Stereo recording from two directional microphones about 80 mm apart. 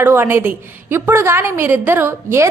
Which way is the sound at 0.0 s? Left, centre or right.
Right.